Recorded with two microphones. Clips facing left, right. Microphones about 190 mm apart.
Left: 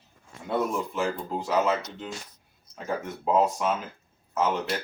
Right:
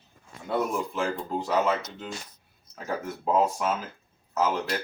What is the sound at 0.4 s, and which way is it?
Speech, centre (ahead or behind).